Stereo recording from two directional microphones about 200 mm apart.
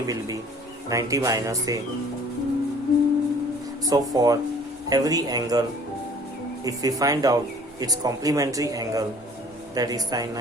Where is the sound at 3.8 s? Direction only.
20° right (ahead or behind).